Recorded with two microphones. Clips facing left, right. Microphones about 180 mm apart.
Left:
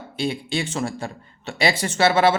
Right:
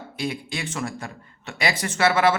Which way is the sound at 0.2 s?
30° left (ahead or behind).